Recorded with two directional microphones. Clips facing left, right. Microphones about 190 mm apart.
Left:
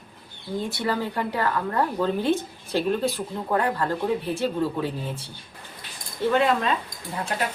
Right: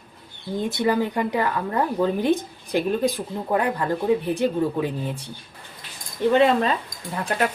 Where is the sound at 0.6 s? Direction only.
20° right (ahead or behind).